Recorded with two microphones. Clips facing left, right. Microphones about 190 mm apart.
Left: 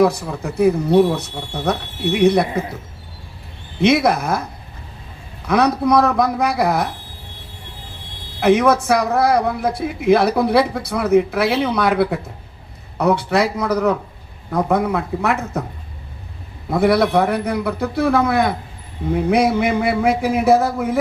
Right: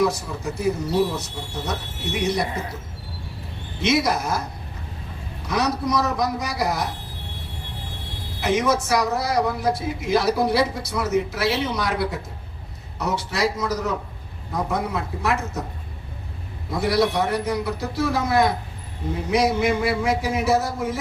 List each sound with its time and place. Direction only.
0.0 s speech: 60° left (ahead or behind)
3.8 s speech: 60° left (ahead or behind)
5.5 s speech: 60° left (ahead or behind)
8.4 s speech: 60° left (ahead or behind)
16.6 s speech: 60° left (ahead or behind)